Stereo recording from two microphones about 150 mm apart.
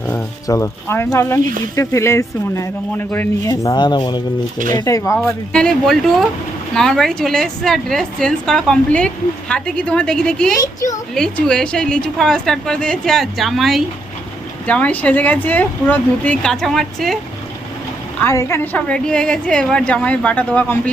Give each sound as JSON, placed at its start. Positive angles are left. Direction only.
{"t": 0.1, "sound": "speech", "side_deg": 20}
{"t": 3.5, "sound": "speech", "side_deg": 25}
{"t": 5.5, "sound": "a woman's voice", "side_deg": 5}
{"t": 10.6, "sound": "speech", "side_deg": 20}
{"t": 11.1, "sound": "a woman's voice", "side_deg": 5}
{"t": 18.2, "sound": "a woman's voice", "side_deg": 15}